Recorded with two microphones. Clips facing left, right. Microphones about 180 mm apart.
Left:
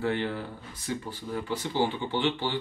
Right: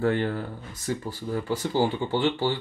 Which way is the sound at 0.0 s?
45° right (ahead or behind).